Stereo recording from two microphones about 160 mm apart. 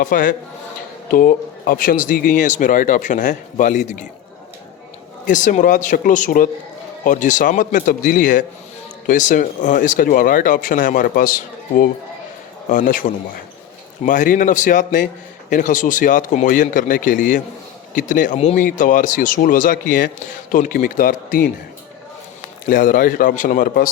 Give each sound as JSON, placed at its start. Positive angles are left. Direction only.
{"t": 0.0, "sound": "speech", "side_deg": 55}
{"t": 5.2, "sound": "speech", "side_deg": 55}
{"t": 18.3, "sound": "speech", "side_deg": 40}
{"t": 18.6, "sound": "speech", "side_deg": 55}
{"t": 22.6, "sound": "speech", "side_deg": 55}